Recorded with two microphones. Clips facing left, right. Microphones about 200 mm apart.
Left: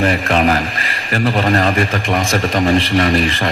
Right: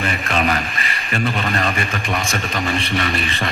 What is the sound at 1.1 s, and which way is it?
Speech, 70° left (ahead or behind).